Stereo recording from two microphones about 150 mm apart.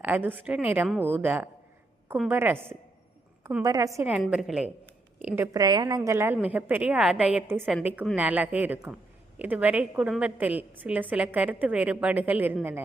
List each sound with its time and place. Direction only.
0.0 s a woman's voice: 10° right (ahead or behind)
4.0 s a woman's voice: 10° right (ahead or behind)
5.5 s a woman's voice: 25° right (ahead or behind)